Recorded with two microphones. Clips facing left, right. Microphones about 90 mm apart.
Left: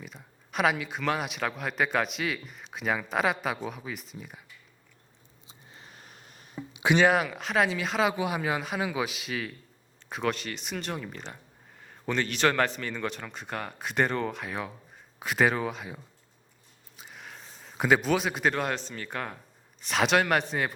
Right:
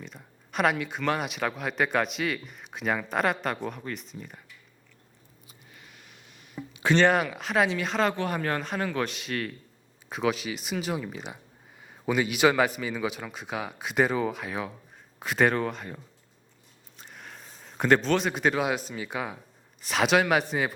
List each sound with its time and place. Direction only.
0.0 s speech: centre (ahead or behind)
5.5 s a sound: 30° left (ahead or behind)
6.7 s speech: 10° left (ahead or behind)
17.0 s a man's voice: centre (ahead or behind)